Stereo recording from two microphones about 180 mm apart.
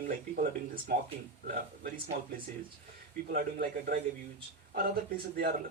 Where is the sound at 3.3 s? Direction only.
55° right (ahead or behind).